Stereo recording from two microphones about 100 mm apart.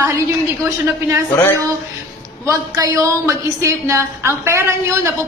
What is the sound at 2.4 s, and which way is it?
A woman's voice, 35° right (ahead or behind).